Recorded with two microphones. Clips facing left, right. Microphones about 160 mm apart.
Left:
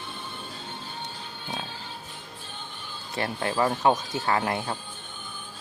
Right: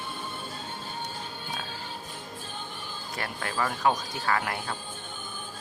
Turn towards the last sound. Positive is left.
turn(degrees=25)  # may be behind; listen again after turning